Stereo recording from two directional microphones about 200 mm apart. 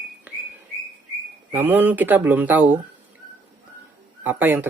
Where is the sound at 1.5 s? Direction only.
10° right (ahead or behind).